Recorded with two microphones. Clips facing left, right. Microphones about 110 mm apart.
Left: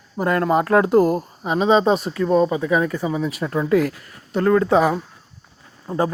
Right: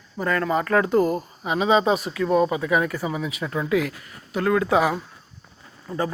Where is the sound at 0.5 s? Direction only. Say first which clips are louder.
Left 5 dB; 10° left (ahead or behind); by 2.6 s 5° right (ahead or behind).